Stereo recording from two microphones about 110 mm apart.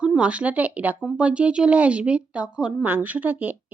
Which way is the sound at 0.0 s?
10° right (ahead or behind).